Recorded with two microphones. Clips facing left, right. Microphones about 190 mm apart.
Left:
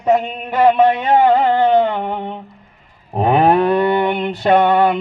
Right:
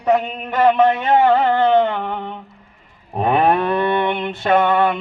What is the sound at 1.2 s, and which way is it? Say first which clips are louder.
Music: left 2 dB; 15° left (ahead or behind).